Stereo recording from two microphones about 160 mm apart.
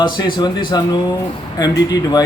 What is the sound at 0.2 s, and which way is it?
Speech, 30° left (ahead or behind).